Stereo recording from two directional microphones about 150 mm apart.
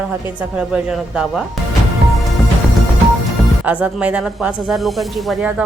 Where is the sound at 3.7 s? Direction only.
10° right (ahead or behind).